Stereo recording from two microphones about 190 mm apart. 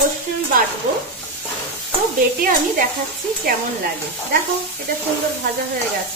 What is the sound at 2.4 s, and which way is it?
Speech, 45° right (ahead or behind).